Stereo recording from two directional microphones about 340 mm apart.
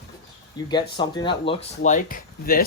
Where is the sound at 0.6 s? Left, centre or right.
Centre.